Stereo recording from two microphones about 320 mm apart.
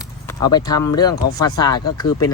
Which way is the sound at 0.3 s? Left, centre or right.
Centre.